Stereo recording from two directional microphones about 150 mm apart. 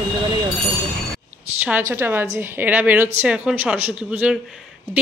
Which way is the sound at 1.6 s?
15° right (ahead or behind).